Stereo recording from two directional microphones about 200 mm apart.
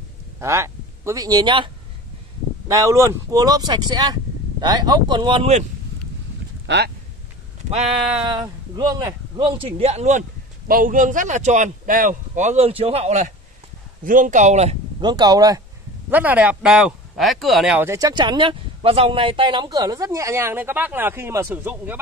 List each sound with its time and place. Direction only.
0.4 s speech: 15° right (ahead or behind)
2.7 s speech: 15° right (ahead or behind); by 5.7 s 30° right (ahead or behind)
6.6 s speech: 60° right (ahead or behind)
8.2 s speech: 20° right (ahead or behind)
15.0 s speech: 20° right (ahead or behind)